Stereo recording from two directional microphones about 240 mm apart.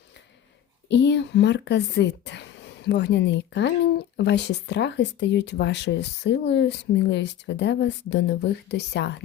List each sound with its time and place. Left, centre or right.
0.9 s speech: left